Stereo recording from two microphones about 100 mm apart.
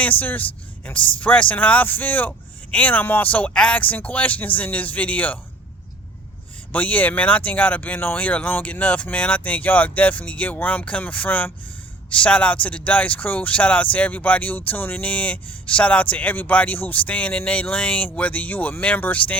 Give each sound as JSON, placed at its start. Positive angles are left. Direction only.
{"t": 0.0, "sound": "speech", "side_deg": 15}
{"t": 6.7, "sound": "speech", "side_deg": 15}